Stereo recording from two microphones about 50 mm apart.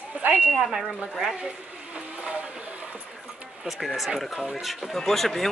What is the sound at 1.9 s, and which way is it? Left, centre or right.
Vehicle, right.